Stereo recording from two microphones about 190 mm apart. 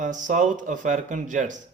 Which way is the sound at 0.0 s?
40° right (ahead or behind).